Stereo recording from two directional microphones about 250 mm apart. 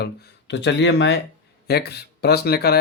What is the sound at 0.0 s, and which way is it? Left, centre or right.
Speech, left.